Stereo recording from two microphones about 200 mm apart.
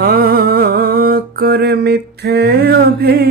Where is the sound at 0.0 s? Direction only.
50° right (ahead or behind).